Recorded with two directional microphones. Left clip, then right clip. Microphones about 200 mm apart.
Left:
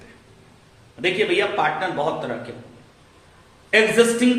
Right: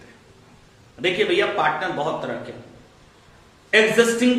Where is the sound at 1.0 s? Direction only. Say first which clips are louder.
Even; 10° left (ahead or behind).